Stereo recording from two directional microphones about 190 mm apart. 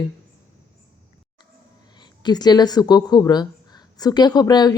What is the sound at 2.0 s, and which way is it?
Speech, 20° left (ahead or behind).